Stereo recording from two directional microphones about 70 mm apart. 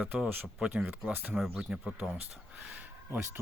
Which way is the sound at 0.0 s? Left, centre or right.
Right.